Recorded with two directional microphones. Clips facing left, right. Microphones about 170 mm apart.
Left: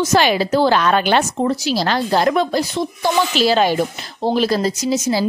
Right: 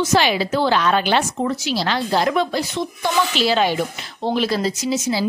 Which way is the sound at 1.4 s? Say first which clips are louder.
Left 3 dB; 35° left (ahead or behind).